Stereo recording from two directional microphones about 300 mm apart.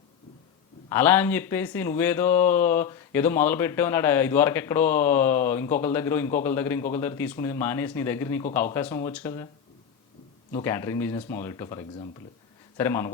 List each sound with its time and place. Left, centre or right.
0.9 s speech: centre
10.5 s speech: centre